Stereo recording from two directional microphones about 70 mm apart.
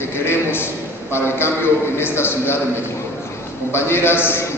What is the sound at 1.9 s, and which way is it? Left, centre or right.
Speech, left.